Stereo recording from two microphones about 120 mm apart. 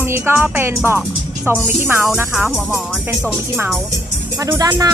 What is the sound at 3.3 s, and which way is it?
Speech, 15° right (ahead or behind).